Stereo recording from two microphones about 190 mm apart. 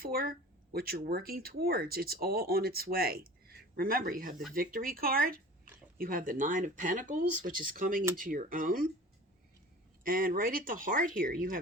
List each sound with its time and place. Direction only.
0.0 s speech: 50° right (ahead or behind)
10.0 s speech: 50° right (ahead or behind)